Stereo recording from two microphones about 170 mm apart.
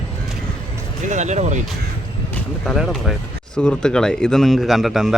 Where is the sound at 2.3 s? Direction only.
Centre (ahead or behind).